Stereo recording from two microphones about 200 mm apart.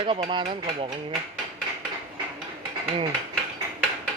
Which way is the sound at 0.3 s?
30° right (ahead or behind).